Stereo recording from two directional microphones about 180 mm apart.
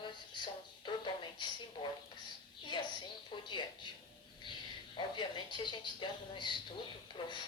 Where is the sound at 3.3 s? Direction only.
25° left (ahead or behind).